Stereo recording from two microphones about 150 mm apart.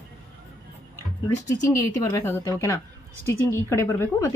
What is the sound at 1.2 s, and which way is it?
A woman's voice, 20° left (ahead or behind).